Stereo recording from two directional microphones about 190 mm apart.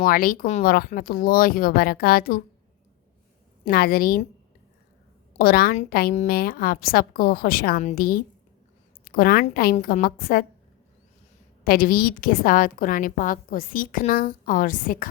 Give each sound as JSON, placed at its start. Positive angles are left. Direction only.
{"t": 0.0, "sound": "a woman's voice", "side_deg": 50}
{"t": 3.7, "sound": "a woman's voice", "side_deg": 50}
{"t": 5.4, "sound": "a woman's voice", "side_deg": 50}
{"t": 11.6, "sound": "a woman's voice", "side_deg": 50}